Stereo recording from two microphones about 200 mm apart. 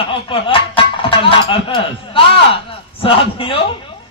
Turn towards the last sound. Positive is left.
turn(degrees=25)  # may be behind; listen again after turning